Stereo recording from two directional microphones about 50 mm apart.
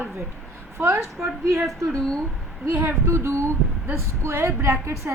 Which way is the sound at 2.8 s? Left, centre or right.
Right.